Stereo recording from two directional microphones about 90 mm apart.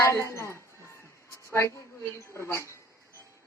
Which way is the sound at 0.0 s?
30° left (ahead or behind).